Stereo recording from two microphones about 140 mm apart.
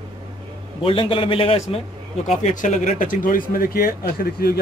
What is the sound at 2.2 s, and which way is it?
Speech, 60° left (ahead or behind).